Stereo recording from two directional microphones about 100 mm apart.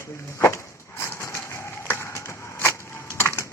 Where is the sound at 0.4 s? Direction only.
25° left (ahead or behind).